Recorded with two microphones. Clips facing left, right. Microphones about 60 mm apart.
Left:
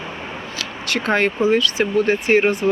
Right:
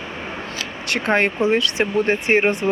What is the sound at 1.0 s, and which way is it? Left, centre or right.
Speech, right.